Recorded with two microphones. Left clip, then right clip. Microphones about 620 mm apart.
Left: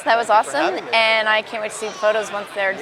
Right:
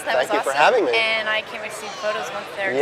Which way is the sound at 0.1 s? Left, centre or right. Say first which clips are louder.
Left 4 dB; left.